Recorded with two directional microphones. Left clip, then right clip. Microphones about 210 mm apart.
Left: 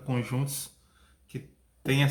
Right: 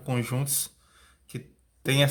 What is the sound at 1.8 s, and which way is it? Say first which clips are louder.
Speech: right 4 dB; 55° right (ahead or behind).